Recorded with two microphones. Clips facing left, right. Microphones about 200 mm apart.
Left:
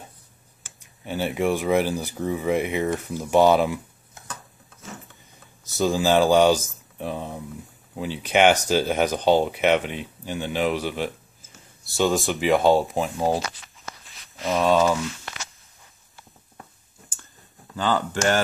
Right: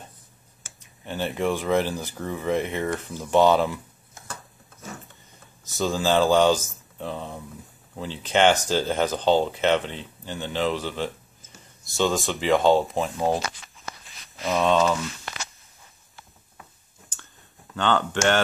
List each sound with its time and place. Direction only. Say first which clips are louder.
1.0 s speech: left 2 dB; 15° left (ahead or behind)
5.8 s speech: left 2 dB; 20° left (ahead or behind)
12.3 s speech: left 2 dB; 15° left (ahead or behind)
12.8 s speech: left 1 dB; centre (ahead or behind)
14.0 s a sound: left 1 dB; centre (ahead or behind)
17.7 s speech: even; 5° left (ahead or behind)